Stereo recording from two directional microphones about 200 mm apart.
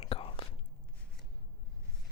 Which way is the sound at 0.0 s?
30° left (ahead or behind).